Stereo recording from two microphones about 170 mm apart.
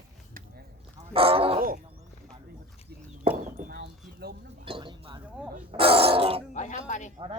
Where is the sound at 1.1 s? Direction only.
35° right (ahead or behind).